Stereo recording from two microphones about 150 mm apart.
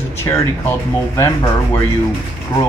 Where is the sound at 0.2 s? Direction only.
15° left (ahead or behind).